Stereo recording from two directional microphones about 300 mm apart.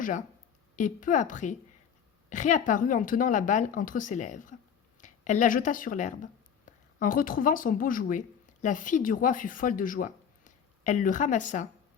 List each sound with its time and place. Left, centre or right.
0.8 s a woman's voice: left